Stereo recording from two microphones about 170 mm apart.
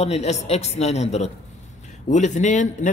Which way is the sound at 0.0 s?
40° left (ahead or behind).